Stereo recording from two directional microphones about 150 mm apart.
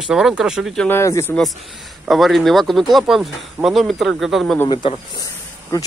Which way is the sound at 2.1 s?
Centre (ahead or behind).